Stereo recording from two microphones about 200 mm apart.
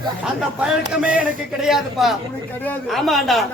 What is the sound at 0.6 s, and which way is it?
Speech, 5° right (ahead or behind).